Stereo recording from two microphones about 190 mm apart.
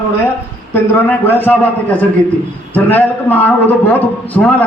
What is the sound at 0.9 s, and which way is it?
A man's voice, 10° left (ahead or behind).